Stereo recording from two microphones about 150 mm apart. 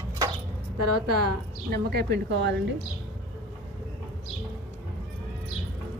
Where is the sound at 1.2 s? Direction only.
90° right.